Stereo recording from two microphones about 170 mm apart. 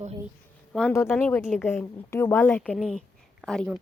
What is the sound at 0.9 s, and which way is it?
A woman's voice, 15° left (ahead or behind).